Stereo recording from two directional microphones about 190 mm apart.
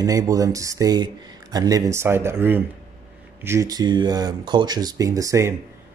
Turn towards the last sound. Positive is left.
turn(degrees=-15)  # may be behind; listen again after turning